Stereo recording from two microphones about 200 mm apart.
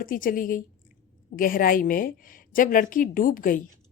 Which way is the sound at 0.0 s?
45° left (ahead or behind).